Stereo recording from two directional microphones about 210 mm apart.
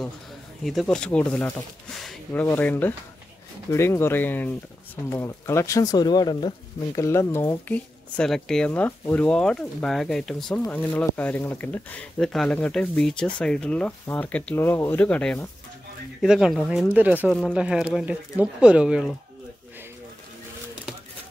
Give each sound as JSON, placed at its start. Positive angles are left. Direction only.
{"t": 0.7, "sound": "speech", "side_deg": 0}
{"t": 2.0, "sound": "a sound", "side_deg": 0}
{"t": 2.4, "sound": "speech", "side_deg": 10}